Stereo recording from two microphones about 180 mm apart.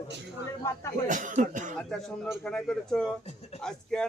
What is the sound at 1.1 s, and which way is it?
Speech, 45° right (ahead or behind).